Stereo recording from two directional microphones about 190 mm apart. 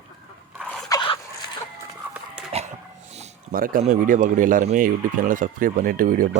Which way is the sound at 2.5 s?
30° right (ahead or behind).